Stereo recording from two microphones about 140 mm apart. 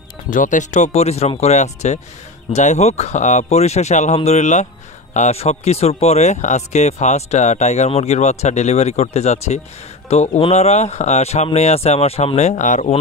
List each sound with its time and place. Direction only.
0.3 s speech: 65° left (ahead or behind)